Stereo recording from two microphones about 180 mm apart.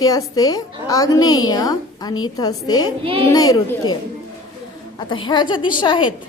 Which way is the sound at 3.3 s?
20° left (ahead or behind).